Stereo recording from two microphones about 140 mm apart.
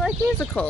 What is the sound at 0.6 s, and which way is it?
Speech, 10° left (ahead or behind).